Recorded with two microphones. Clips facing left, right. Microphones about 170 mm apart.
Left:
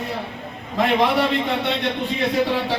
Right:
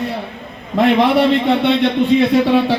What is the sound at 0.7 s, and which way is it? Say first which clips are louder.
A man's voice: right 6 dB; 65° right (ahead or behind).